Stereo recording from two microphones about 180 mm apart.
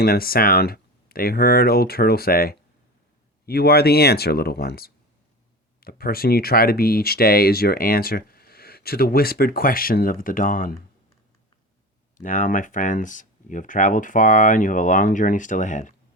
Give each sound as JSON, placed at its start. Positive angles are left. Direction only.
{"t": 0.0, "sound": "speech", "side_deg": 55}
{"t": 12.1, "sound": "speech", "side_deg": 45}